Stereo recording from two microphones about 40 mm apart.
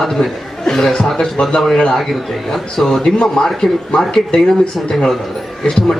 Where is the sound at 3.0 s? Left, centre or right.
Centre.